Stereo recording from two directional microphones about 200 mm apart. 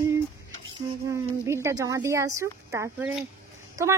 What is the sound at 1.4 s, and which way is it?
A woman's voice, 15° right (ahead or behind).